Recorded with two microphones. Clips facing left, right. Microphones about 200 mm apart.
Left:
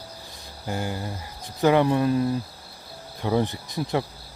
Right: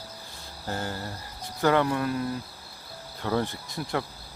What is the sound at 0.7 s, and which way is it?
Speech, 15° left (ahead or behind).